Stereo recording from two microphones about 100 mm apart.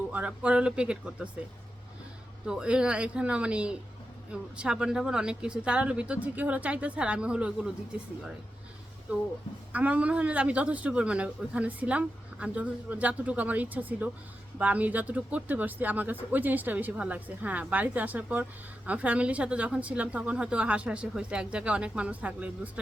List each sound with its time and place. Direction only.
0.1 s speech: 15° right (ahead or behind)
2.5 s speech: 10° right (ahead or behind)
9.7 s speech: 15° right (ahead or behind)